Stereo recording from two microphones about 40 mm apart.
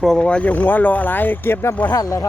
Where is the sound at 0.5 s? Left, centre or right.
Left.